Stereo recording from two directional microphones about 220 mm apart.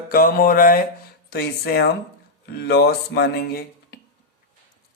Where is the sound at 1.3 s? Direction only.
45° left (ahead or behind).